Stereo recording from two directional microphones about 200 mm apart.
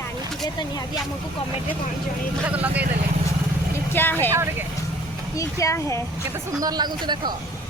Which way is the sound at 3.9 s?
10° left (ahead or behind).